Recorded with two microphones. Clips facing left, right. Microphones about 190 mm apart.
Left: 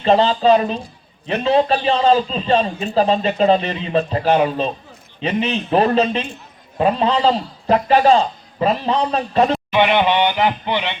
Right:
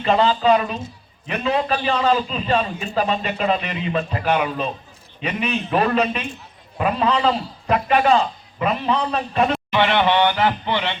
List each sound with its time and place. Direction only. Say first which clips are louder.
0.0 s a man's voice: left 3 dB; 30° left (ahead or behind)
9.7 s speech: left 2 dB; 15° left (ahead or behind)